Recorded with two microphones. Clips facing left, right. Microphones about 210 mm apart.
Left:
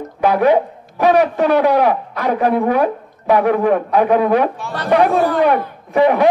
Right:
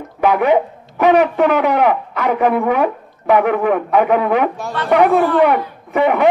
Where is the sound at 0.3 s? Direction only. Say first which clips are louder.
Left 1 dB; 35° left (ahead or behind).